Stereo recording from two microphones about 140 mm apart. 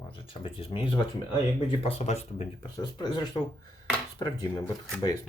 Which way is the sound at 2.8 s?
30° left (ahead or behind).